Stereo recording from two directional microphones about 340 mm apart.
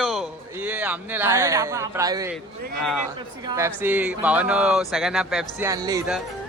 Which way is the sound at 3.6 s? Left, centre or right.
Centre.